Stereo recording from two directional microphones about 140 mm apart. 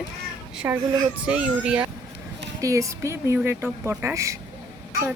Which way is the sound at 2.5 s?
25° right (ahead or behind).